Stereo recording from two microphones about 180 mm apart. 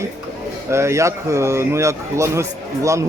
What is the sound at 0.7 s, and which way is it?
Speech, 15° right (ahead or behind).